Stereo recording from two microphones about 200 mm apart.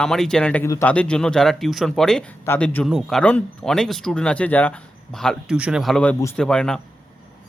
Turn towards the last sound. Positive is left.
turn(degrees=5)  # may be behind; listen again after turning